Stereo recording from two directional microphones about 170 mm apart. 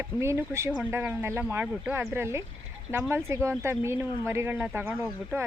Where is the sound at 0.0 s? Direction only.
15° right (ahead or behind).